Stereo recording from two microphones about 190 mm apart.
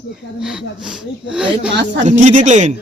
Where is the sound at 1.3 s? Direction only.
5° right (ahead or behind).